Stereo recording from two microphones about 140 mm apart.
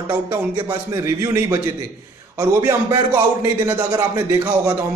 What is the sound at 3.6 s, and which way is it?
Speech, 20° right (ahead or behind).